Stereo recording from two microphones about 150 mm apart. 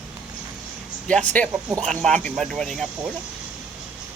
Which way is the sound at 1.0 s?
10° left (ahead or behind).